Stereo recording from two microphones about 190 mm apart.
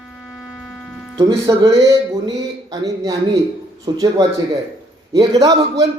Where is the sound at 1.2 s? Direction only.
25° right (ahead or behind).